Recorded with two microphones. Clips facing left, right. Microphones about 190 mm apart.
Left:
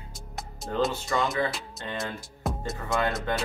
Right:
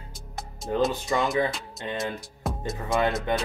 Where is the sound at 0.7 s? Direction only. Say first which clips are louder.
Right 2 dB; 15° right (ahead or behind).